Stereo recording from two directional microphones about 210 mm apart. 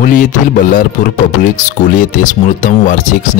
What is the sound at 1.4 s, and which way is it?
Speech, 40° left (ahead or behind).